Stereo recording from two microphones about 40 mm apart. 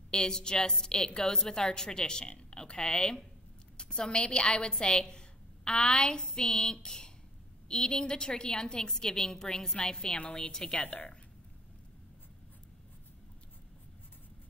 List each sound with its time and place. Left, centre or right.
0.1 s a woman's voice: centre
9.8 s a woman's voice: left